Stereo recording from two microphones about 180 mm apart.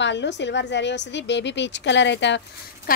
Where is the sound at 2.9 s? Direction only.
50° left (ahead or behind).